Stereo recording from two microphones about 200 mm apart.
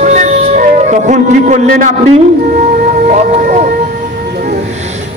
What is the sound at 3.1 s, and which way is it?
Speech, 40° right (ahead or behind).